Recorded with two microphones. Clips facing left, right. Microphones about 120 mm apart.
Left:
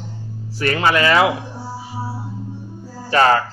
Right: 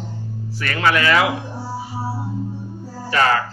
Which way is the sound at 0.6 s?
30° left (ahead or behind).